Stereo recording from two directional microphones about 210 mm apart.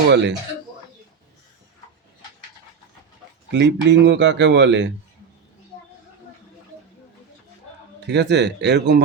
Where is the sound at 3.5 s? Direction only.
60° right (ahead or behind).